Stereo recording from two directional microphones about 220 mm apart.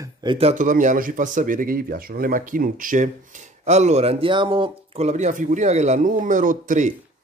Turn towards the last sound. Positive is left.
turn(degrees=-35)  # may be behind; listen again after turning